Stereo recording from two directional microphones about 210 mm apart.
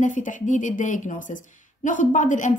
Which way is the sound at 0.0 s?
35° left (ahead or behind).